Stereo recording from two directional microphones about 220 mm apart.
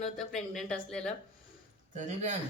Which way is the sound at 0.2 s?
Centre (ahead or behind).